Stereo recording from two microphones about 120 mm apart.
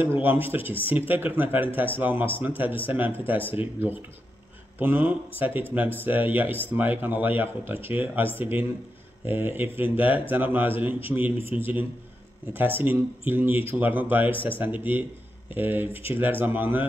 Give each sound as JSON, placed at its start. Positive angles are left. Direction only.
{"t": 0.0, "sound": "speech", "side_deg": -15}
{"t": 4.7, "sound": "speech", "side_deg": -15}